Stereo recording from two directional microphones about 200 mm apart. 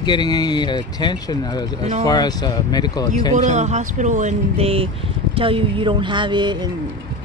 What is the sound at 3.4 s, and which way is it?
Speech, 35° right (ahead or behind).